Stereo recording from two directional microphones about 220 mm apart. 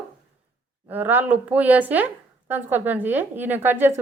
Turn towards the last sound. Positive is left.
turn(degrees=-10)  # may be behind; listen again after turning